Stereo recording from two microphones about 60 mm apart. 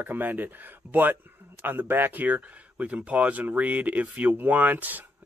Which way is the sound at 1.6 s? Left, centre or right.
Right.